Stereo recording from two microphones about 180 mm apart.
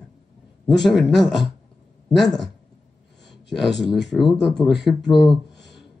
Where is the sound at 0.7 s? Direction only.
Centre (ahead or behind).